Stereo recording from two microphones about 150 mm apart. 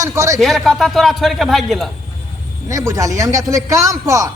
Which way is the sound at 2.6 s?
20° right (ahead or behind).